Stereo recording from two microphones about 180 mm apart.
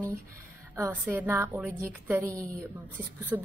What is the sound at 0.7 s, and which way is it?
A woman's voice, 10° right (ahead or behind).